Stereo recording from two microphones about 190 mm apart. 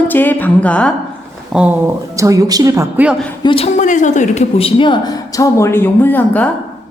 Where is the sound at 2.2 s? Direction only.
20° right (ahead or behind).